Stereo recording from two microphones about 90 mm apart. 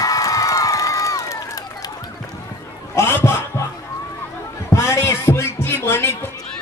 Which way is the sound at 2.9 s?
30° left (ahead or behind).